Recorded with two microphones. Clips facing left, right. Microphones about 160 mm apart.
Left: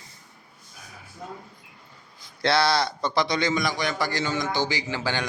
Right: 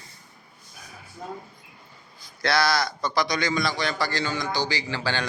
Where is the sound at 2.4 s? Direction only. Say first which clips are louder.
Left 1 dB; 25° left (ahead or behind).